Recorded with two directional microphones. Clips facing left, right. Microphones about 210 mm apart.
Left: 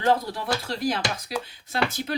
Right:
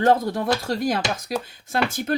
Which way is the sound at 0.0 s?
45° right (ahead or behind).